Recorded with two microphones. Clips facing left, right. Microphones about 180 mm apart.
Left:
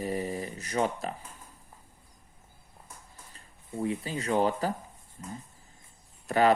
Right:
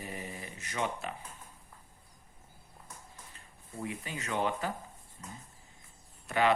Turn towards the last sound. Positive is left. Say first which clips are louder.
# left 5 dB
turn(degrees=40)  # may be behind; listen again after turning